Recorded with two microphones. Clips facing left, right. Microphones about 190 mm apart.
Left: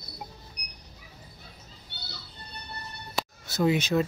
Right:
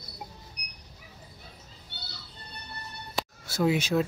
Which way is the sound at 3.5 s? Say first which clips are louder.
Left 1 dB; 5° right (ahead or behind).